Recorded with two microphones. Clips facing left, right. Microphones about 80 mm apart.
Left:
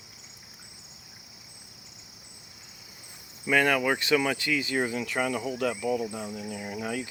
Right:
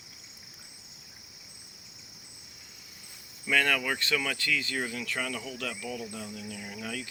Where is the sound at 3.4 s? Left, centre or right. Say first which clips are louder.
Left 4 dB; centre.